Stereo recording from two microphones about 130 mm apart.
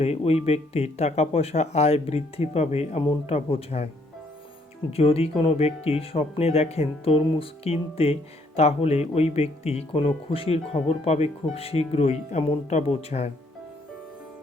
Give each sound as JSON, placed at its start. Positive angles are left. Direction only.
{"t": 0.0, "sound": "speech", "side_deg": 55}
{"t": 4.9, "sound": "speech", "side_deg": 50}